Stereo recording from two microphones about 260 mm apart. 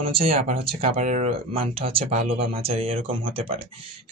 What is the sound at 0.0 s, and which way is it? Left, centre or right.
Speech, right.